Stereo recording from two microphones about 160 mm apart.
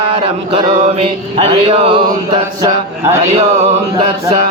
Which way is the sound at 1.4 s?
40° right (ahead or behind).